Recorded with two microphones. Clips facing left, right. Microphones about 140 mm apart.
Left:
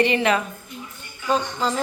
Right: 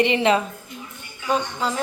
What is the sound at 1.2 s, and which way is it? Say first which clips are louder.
Speech: left 1 dB; 5° right (ahead or behind).